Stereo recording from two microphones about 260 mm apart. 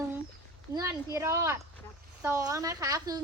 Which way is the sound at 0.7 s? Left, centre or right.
Centre.